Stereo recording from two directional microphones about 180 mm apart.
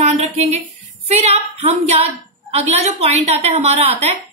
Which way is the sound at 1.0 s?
35° right (ahead or behind).